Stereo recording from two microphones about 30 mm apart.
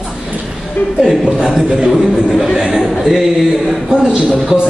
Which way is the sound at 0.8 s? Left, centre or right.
Left.